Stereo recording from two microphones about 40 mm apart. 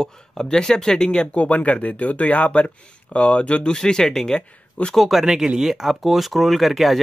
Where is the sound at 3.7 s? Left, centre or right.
Centre.